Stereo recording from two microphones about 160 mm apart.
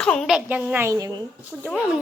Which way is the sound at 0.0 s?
5° left (ahead or behind).